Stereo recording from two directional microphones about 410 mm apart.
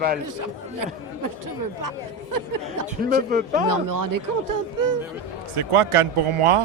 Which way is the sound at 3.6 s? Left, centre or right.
Right.